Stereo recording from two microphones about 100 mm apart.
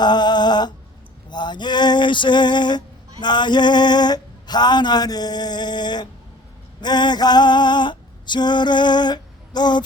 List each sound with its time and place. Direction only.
0.0 s music: 45° left (ahead or behind)
1.3 s a sound: 50° left (ahead or behind)
6.8 s female singing: 45° left (ahead or behind)